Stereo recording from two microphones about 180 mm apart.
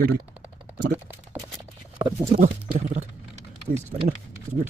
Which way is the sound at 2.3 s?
45° right (ahead or behind).